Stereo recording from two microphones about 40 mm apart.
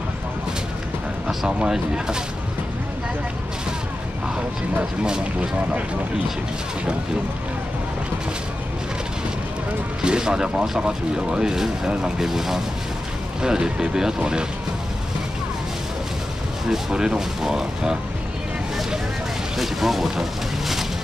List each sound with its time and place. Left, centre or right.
1.6 s speech: centre
5.0 s speech: right
10.0 s speech: centre
13.4 s speech: centre
16.6 s speech: centre
19.5 s speech: centre